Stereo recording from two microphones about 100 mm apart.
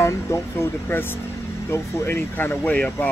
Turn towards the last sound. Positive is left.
turn(degrees=15)  # may be behind; listen again after turning